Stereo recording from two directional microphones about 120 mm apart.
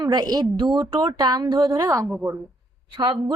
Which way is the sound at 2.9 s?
40° right (ahead or behind).